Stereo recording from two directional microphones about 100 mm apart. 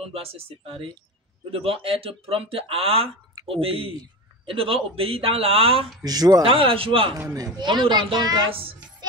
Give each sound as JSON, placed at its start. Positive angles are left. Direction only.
{"t": 0.0, "sound": "speech", "side_deg": -75}
{"t": 6.0, "sound": "speech", "side_deg": -40}
{"t": 6.4, "sound": "speech", "side_deg": -65}
{"t": 7.3, "sound": "speech", "side_deg": -40}
{"t": 8.5, "sound": "speech", "side_deg": -65}